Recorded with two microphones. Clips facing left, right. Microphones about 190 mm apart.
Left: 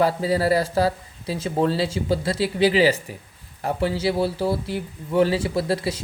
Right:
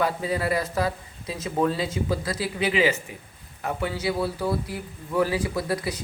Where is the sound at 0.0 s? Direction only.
35° left (ahead or behind).